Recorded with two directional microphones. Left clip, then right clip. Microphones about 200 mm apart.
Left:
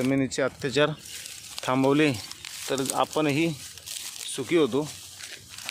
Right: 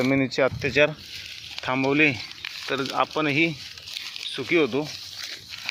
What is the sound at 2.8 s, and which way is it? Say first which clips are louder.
Speech: right 1 dB; 10° left (ahead or behind).